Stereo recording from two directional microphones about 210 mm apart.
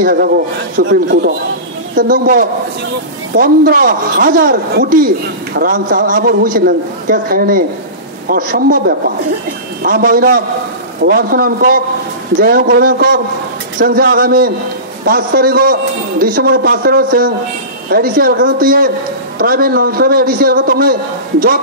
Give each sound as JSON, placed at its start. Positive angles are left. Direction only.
{"t": 0.0, "sound": "a man's voice", "side_deg": -45}